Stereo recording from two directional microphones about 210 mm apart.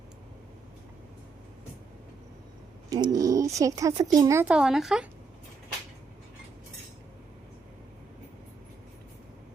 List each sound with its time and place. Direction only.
2.9 s speech: 20° right (ahead or behind); by 5.0 s centre (ahead or behind)